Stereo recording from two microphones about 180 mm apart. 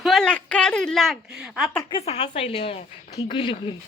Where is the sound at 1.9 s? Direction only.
35° left (ahead or behind).